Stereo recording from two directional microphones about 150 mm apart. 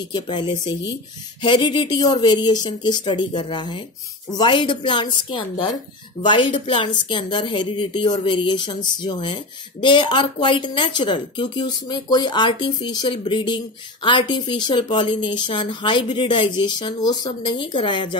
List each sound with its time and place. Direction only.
0.1 s speech: 30° left (ahead or behind)